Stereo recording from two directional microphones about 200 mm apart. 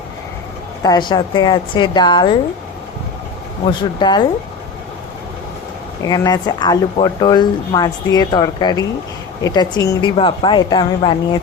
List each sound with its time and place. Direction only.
0.8 s speech: 20° left (ahead or behind)
3.7 s speech: 25° left (ahead or behind)
6.1 s speech: 20° left (ahead or behind)